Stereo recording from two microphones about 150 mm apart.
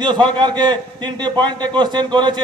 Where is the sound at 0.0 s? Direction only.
30° right (ahead or behind).